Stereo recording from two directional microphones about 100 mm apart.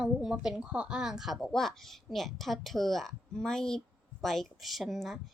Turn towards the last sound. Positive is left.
turn(degrees=0)  # may be behind; listen again after turning